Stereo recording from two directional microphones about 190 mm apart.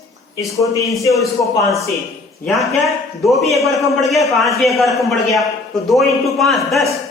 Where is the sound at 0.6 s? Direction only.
15° left (ahead or behind).